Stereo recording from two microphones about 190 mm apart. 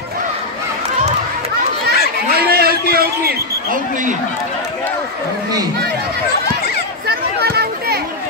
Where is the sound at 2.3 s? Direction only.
55° right (ahead or behind).